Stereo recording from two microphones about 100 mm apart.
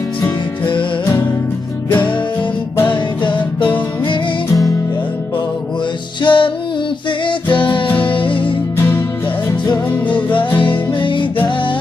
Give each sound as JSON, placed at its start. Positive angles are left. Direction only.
{"t": 3.2, "sound": "music", "side_deg": 55}
{"t": 6.2, "sound": "music", "side_deg": 55}
{"t": 7.9, "sound": "music", "side_deg": 15}
{"t": 8.1, "sound": "music", "side_deg": 55}
{"t": 10.7, "sound": "music", "side_deg": 55}